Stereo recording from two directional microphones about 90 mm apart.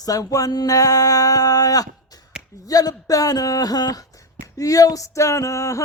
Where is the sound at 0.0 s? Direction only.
40° left (ahead or behind).